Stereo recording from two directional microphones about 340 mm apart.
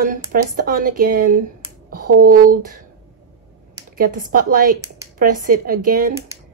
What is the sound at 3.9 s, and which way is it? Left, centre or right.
A woman's voice, right.